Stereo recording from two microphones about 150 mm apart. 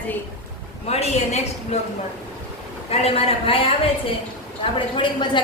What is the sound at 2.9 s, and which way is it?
Speech, 40° left (ahead or behind).